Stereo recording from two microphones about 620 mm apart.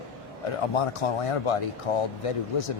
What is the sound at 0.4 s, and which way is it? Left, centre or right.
Speech, left.